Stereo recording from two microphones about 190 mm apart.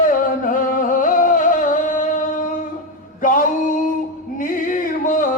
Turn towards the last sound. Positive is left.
turn(degrees=45)  # may be behind; listen again after turning